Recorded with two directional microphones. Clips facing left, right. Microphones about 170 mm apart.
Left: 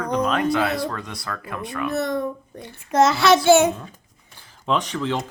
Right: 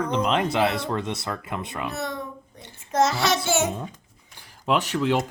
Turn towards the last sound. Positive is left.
turn(degrees=-5)  # may be behind; listen again after turning